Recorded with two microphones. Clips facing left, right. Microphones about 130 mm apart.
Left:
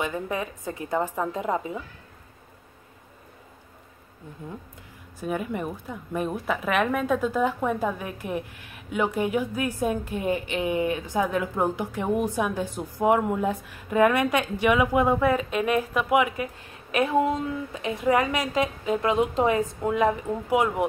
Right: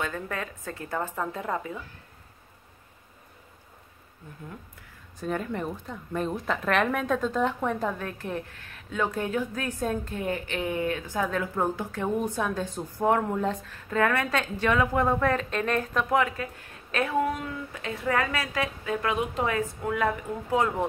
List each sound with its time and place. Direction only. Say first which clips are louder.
0.0 s a woman's voice: left 4 dB; 15° left (ahead or behind)
5.2 s a woman's voice: left 1 dB; 10° left (ahead or behind)